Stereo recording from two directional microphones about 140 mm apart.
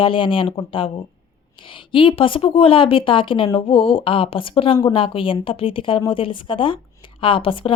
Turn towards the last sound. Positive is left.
turn(degrees=40)  # may be behind; listen again after turning